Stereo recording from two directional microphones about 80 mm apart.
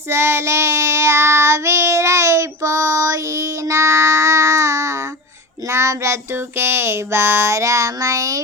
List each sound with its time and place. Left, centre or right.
0.1 s child singing: right